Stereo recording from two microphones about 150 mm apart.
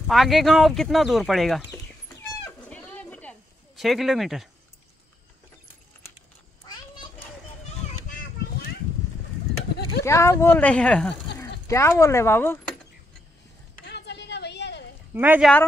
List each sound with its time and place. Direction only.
0.0 s speech: centre (ahead or behind)
1.7 s cat: 20° left (ahead or behind)
2.7 s a sound: 10° left (ahead or behind)
6.6 s children playing: 30° left (ahead or behind)
10.0 s speech: 20° left (ahead or behind)
11.6 s speech: 20° left (ahead or behind)
15.1 s speech: 10° right (ahead or behind)